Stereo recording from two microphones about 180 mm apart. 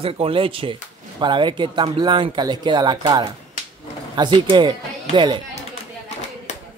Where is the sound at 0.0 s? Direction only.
30° right (ahead or behind).